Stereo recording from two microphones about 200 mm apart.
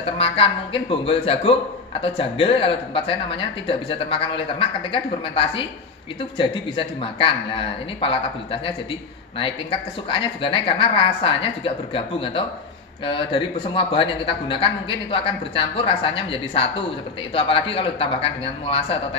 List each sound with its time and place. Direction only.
0.0 s a man's voice: 25° left (ahead or behind)